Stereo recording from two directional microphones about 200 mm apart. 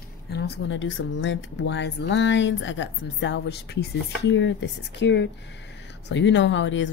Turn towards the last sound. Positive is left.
turn(degrees=65)  # may be behind; listen again after turning